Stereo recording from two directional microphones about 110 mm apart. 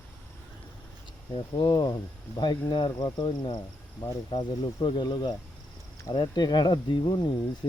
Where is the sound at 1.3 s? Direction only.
50° left (ahead or behind).